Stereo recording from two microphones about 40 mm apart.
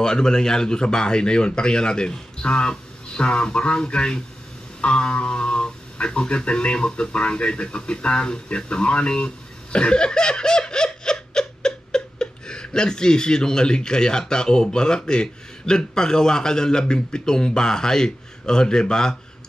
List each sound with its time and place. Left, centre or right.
0.0 s speech: centre